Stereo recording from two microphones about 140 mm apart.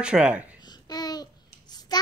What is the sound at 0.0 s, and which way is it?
Speech, 5° right (ahead or behind).